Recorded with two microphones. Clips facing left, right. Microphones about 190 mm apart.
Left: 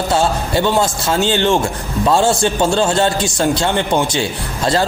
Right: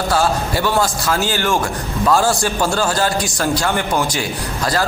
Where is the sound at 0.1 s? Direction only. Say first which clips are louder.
Left 1 dB; 25° left (ahead or behind).